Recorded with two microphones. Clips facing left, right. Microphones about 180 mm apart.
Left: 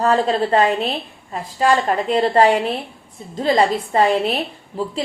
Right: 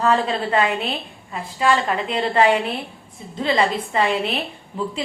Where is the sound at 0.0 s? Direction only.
40° left (ahead or behind).